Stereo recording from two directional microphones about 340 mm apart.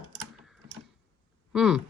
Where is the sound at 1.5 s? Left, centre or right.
Centre.